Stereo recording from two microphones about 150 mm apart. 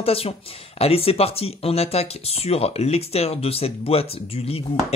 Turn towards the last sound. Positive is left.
turn(degrees=40)  # may be behind; listen again after turning